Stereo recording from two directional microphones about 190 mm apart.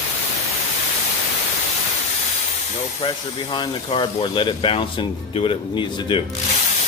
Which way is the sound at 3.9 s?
30° left (ahead or behind).